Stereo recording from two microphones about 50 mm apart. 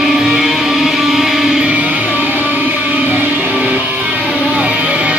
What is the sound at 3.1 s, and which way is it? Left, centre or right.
Music, right.